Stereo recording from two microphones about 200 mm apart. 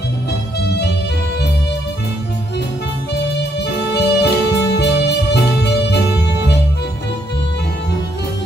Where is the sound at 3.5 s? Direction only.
55° left (ahead or behind).